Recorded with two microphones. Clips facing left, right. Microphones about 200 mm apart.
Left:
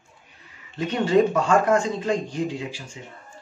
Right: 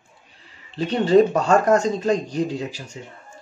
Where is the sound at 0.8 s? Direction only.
35° right (ahead or behind).